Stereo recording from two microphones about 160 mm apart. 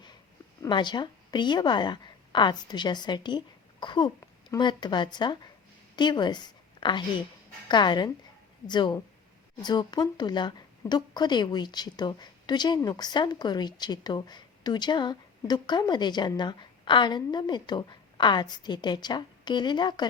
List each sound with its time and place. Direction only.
0.6 s a woman's voice: 30° left (ahead or behind)